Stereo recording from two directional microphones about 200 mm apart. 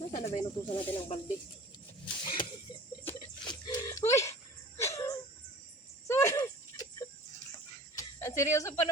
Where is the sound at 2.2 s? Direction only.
25° left (ahead or behind).